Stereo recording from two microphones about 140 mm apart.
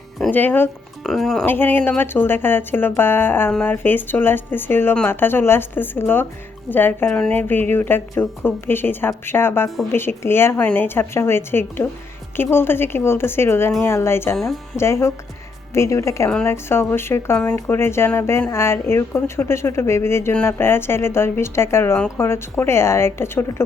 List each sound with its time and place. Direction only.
0.3 s speech: 15° left (ahead or behind)
1.0 s speech: centre (ahead or behind)
1.5 s speech: 15° left (ahead or behind)
14.3 s speech: centre (ahead or behind)
14.8 s speech: 20° left (ahead or behind)